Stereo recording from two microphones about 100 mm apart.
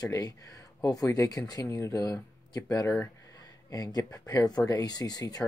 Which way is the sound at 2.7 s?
30° left (ahead or behind).